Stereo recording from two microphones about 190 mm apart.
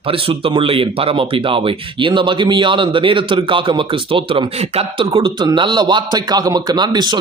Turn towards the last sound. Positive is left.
turn(degrees=-20)  # may be behind; listen again after turning